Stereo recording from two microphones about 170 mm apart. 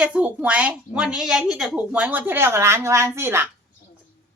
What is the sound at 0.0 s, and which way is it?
Speech, 10° right (ahead or behind).